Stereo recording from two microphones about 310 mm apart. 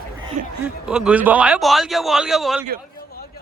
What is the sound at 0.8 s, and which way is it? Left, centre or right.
A man's voice, centre.